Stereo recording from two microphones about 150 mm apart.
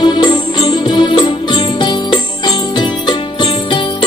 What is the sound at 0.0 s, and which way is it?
Music, 30° left (ahead or behind).